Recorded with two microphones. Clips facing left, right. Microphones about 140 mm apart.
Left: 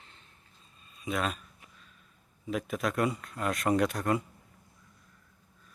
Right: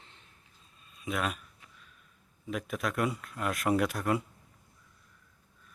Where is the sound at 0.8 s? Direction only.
Centre (ahead or behind).